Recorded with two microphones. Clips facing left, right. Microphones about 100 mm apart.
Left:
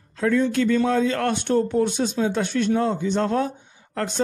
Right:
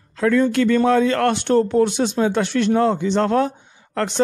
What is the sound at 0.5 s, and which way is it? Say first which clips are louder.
A man's voice: right 4 dB; 70° right (ahead or behind).